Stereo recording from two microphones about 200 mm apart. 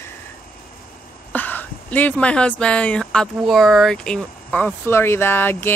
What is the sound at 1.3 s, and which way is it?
Speech, 10° left (ahead or behind).